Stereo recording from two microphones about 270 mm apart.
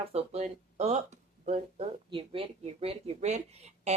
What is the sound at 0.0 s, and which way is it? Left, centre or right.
Speech, right.